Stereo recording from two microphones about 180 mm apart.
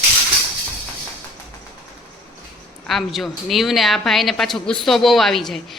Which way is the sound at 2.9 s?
Centre (ahead or behind).